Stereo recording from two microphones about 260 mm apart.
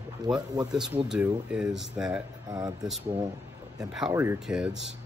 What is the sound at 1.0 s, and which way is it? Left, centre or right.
Speech, centre.